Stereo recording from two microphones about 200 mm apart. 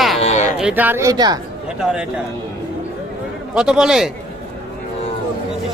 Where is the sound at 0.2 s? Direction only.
35° left (ahead or behind).